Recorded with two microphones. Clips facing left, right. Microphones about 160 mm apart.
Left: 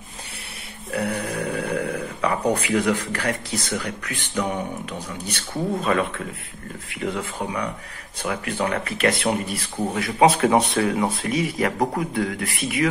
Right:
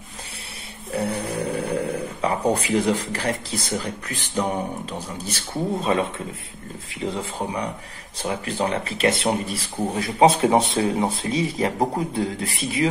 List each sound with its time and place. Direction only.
0.9 s speech: 25° right (ahead or behind)
5.8 s speech: 25° right (ahead or behind)